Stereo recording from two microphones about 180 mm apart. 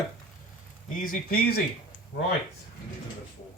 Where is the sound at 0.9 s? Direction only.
50° left (ahead or behind).